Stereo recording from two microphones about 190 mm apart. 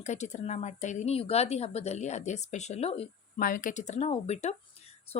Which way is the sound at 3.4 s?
45° left (ahead or behind).